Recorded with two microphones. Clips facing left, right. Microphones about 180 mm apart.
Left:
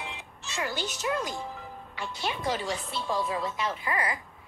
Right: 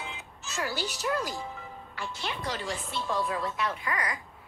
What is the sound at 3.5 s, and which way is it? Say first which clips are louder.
Speech: left 1 dB; 25° left (ahead or behind).